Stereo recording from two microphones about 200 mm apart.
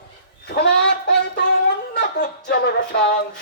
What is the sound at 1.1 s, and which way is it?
Music, 60° left (ahead or behind).